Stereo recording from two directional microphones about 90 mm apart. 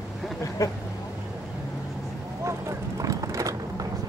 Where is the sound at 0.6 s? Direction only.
35° left (ahead or behind).